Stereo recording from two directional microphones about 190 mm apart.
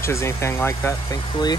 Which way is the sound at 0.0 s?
15° left (ahead or behind).